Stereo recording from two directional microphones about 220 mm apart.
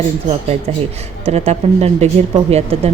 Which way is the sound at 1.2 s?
30° right (ahead or behind).